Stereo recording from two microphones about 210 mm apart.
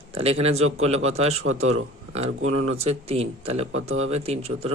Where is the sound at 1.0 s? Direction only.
30° right (ahead or behind).